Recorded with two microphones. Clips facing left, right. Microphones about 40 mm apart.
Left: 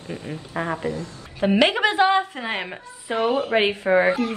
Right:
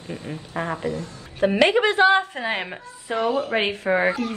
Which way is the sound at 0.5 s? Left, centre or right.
Centre.